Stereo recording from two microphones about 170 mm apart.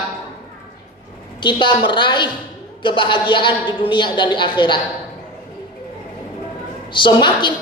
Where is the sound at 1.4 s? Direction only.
30° left (ahead or behind).